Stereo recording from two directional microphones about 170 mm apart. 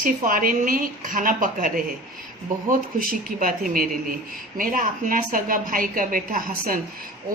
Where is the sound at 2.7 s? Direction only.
55° right (ahead or behind).